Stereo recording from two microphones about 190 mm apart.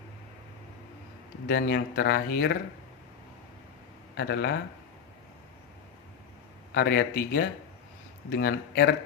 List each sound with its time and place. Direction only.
1.5 s speech: 55° left (ahead or behind)
4.2 s speech: 60° left (ahead or behind)
6.7 s speech: 60° left (ahead or behind)